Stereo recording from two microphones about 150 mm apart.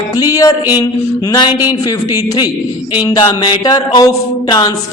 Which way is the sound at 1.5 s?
15° right (ahead or behind).